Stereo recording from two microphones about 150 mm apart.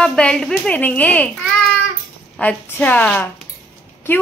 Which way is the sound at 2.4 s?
10° left (ahead or behind).